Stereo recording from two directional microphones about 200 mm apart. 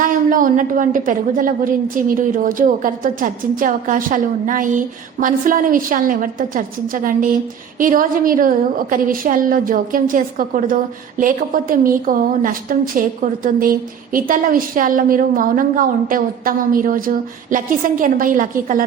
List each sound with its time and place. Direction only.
0.0 s a woman's voice: 45° right (ahead or behind)